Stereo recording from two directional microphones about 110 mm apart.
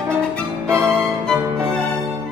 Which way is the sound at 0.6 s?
20° right (ahead or behind).